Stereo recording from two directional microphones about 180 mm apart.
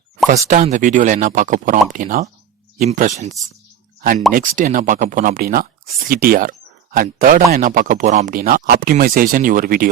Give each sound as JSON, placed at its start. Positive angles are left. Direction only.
{"t": 0.3, "sound": "speech", "side_deg": -45}